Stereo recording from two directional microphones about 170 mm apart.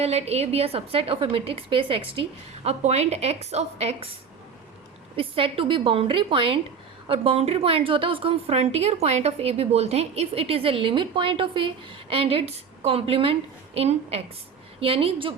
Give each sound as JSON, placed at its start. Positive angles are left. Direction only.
{"t": 0.0, "sound": "a woman's voice", "side_deg": -40}
{"t": 5.1, "sound": "a woman's voice", "side_deg": -35}